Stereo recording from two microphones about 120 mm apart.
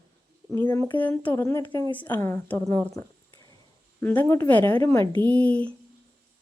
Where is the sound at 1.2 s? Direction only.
20° left (ahead or behind).